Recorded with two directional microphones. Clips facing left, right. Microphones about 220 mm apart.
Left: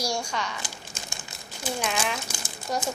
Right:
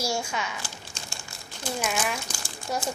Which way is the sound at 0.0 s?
5° right (ahead or behind).